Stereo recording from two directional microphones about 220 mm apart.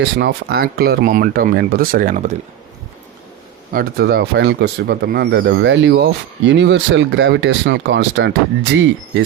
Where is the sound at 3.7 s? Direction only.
45° right (ahead or behind).